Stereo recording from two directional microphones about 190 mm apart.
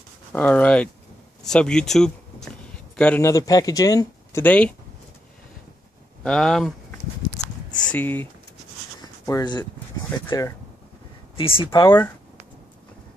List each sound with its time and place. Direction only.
0.3 s speech: 10° left (ahead or behind)
6.2 s speech: 5° left (ahead or behind)
7.9 s speech: 10° left (ahead or behind)
9.0 s a sound: 20° left (ahead or behind)
10.1 s speech: 20° left (ahead or behind)
11.3 s speech: 30° left (ahead or behind)